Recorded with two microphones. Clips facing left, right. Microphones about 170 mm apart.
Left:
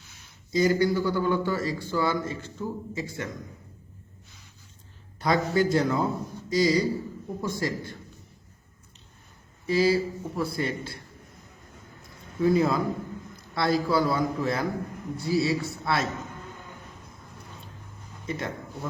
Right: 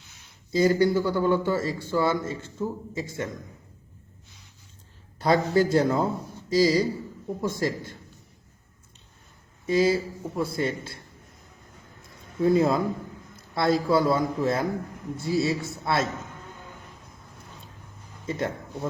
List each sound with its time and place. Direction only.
0.5 s a man's voice: 30° right (ahead or behind)
5.2 s a man's voice: 30° right (ahead or behind)
9.6 s a man's voice: 25° right (ahead or behind)
12.4 s a man's voice: 25° right (ahead or behind)
18.3 s speech: 25° right (ahead or behind)